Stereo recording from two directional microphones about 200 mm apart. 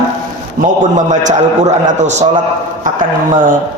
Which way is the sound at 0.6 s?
45° right (ahead or behind).